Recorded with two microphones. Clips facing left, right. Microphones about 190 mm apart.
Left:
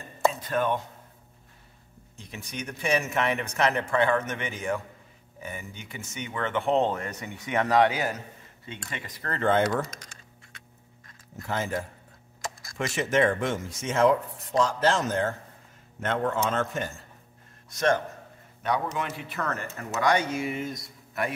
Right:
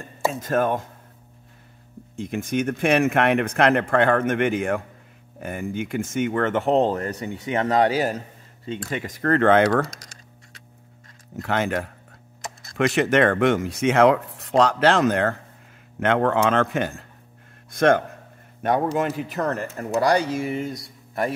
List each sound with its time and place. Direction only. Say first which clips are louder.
0.3 s speech: right 5 dB; 45° right (ahead or behind)
2.2 s speech: right 13 dB; 55° right (ahead or behind); by 7.9 s 30° right (ahead or behind)
8.9 s speech: right 14 dB; 45° right (ahead or behind); by 9.8 s 70° right (ahead or behind)
11.4 s speech: right 6 dB; 80° right
12.7 s a man's voice: right 6 dB; 65° right (ahead or behind)
18.9 s speech: right 8 dB; 40° right (ahead or behind)